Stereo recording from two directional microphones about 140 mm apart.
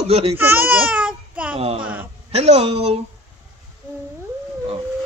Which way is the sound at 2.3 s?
50° right (ahead or behind).